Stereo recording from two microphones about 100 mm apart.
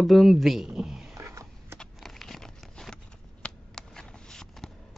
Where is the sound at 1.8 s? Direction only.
5° left (ahead or behind).